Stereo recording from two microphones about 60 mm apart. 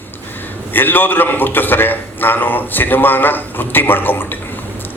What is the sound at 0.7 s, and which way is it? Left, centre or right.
A man's voice, left.